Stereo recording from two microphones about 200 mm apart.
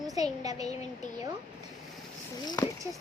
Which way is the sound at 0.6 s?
35° left (ahead or behind).